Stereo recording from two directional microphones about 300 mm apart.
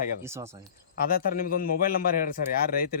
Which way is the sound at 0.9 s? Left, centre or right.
Left.